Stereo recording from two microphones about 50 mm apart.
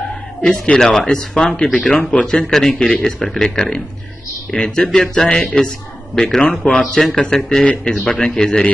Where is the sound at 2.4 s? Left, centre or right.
Centre.